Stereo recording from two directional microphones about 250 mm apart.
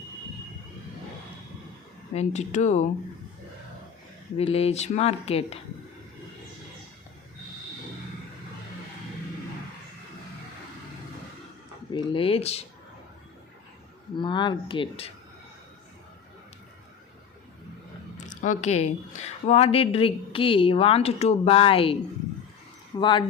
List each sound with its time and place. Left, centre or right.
2.1 s speech: left
4.4 s speech: left
11.9 s speech: centre
14.2 s speech: centre
18.2 s speech: left
23.0 s speech: centre